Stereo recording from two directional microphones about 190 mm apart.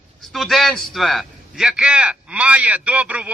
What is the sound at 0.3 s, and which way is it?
A man's voice, centre (ahead or behind).